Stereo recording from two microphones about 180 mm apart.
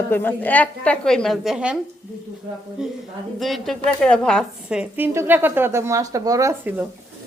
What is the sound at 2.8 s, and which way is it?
A woman's voice, 5° right (ahead or behind).